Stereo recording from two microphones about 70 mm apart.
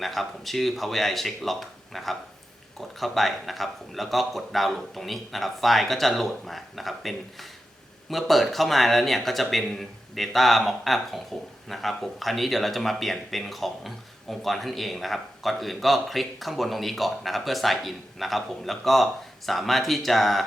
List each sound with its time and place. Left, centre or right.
0.0 s speech: centre